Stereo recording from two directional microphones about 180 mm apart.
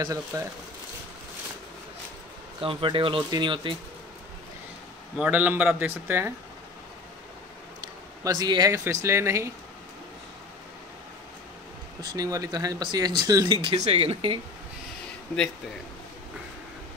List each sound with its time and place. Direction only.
0.0 s speech: 15° right (ahead or behind)
2.6 s speech: 30° right (ahead or behind)
5.1 s speech: 5° right (ahead or behind)
8.2 s speech: 20° right (ahead or behind)
12.0 s speech: 20° right (ahead or behind)
13.7 s speech: 35° right (ahead or behind)